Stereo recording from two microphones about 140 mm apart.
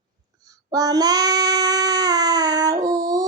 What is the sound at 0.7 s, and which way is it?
Child singing, 25° right (ahead or behind).